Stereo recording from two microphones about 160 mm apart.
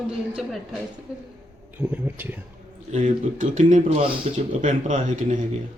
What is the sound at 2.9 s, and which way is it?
Speech, 50° right (ahead or behind).